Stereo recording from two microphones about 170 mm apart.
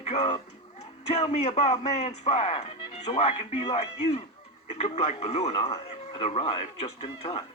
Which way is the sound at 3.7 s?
40° left (ahead or behind).